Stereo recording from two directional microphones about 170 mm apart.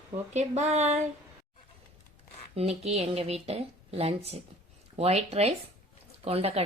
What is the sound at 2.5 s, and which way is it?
Speech, 40° right (ahead or behind).